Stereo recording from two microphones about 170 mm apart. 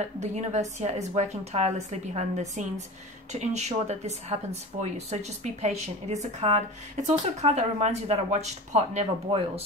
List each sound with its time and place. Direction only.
0.2 s speech: 40° right (ahead or behind)